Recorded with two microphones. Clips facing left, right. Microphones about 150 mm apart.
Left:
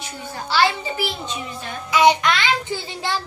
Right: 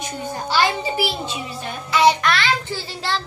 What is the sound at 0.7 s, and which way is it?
Speech, 10° right (ahead or behind).